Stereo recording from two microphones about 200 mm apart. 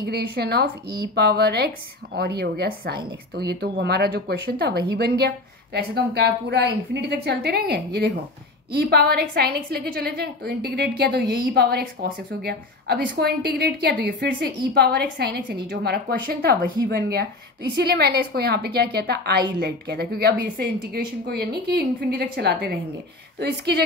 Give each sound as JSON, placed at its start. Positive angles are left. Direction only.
{"t": 0.0, "sound": "a woman's voice", "side_deg": -50}